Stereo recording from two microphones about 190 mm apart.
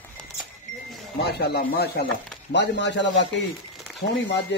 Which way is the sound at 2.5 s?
65° left (ahead or behind).